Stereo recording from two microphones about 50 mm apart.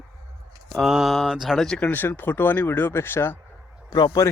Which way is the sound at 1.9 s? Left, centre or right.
Left.